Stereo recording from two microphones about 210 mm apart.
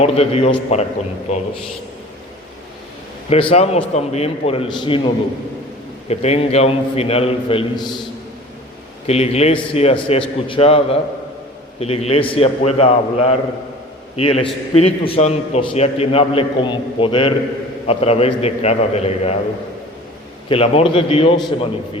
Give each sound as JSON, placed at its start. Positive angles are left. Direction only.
{"t": 0.0, "sound": "a man's voice", "side_deg": 30}
{"t": 3.5, "sound": "a man's voice", "side_deg": 30}
{"t": 9.0, "sound": "a man's voice", "side_deg": 30}
{"t": 20.5, "sound": "a man's voice", "side_deg": 25}